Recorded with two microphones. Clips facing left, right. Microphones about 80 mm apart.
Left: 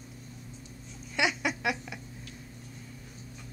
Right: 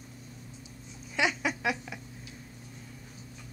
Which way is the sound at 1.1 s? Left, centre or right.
Centre.